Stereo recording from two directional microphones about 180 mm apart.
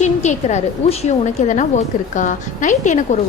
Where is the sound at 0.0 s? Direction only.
40° left (ahead or behind).